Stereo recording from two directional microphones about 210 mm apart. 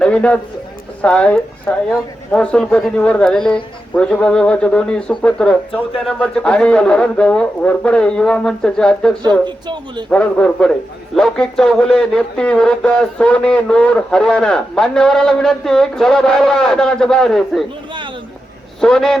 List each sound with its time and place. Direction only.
0.0 s speech: 5° left (ahead or behind)
9.4 s speech: 20° right (ahead or behind)
10.1 s speech: 5° left (ahead or behind)
18.8 s speech: centre (ahead or behind)